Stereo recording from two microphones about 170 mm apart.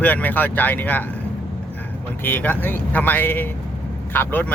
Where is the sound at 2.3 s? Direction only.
10° left (ahead or behind).